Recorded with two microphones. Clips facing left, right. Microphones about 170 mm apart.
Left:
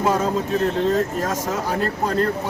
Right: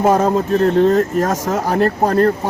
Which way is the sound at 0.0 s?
50° right (ahead or behind).